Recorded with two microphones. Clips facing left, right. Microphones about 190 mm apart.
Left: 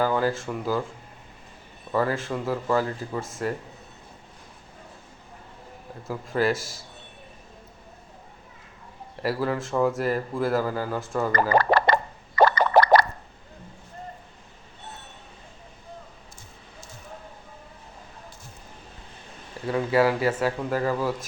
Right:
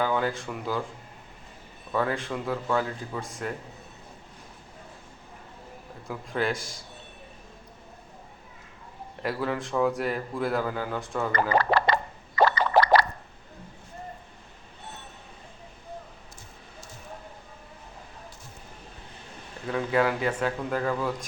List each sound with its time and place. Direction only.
0.0 s speech: centre (ahead or behind)
1.9 s speech: centre (ahead or behind)
6.1 s speech: 5° left (ahead or behind)
9.2 s speech: centre (ahead or behind)
11.3 s speech: 45° left (ahead or behind)
12.4 s a sound: 50° left (ahead or behind)
19.6 s speech: 5° left (ahead or behind)